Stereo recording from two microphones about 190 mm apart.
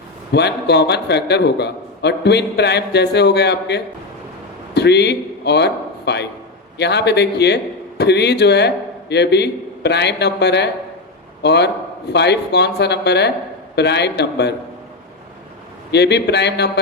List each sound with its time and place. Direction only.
0.3 s a man's voice: 60° left (ahead or behind)
15.9 s a man's voice: 65° left (ahead or behind)